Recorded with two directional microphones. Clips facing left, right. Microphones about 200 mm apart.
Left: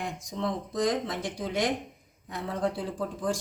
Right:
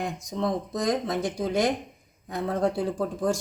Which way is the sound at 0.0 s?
40° right (ahead or behind).